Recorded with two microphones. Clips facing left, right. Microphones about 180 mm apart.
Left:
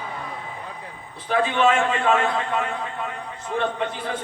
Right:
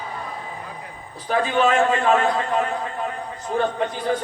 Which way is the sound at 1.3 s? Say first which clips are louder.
Even; 40° right (ahead or behind).